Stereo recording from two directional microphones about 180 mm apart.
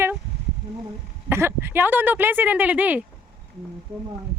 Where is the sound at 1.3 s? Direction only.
15° right (ahead or behind).